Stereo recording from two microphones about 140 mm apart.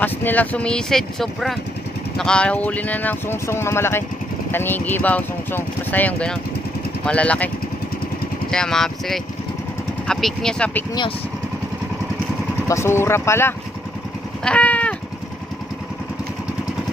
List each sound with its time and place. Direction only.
0.0 s speech: 15° left (ahead or behind)
12.6 s speech: 20° left (ahead or behind)
14.4 s cat: 10° left (ahead or behind)